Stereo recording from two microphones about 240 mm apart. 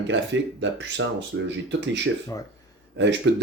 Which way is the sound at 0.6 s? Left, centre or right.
Right.